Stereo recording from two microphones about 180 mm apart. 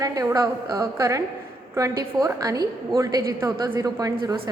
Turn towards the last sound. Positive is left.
turn(degrees=-20)  # may be behind; listen again after turning